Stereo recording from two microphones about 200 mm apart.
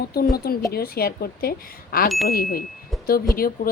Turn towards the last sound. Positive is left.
turn(degrees=45)  # may be behind; listen again after turning